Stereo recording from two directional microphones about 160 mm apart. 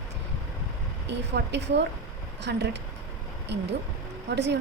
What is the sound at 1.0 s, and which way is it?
A woman's voice, 90° right.